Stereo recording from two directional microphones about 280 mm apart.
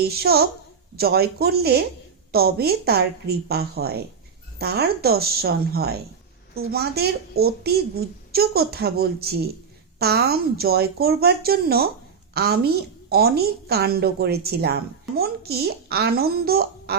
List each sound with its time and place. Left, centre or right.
0.0 s a woman's voice: right